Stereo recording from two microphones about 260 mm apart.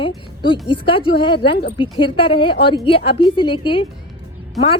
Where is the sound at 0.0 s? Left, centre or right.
Centre.